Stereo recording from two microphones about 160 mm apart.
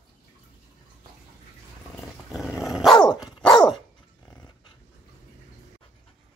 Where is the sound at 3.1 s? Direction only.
25° left (ahead or behind).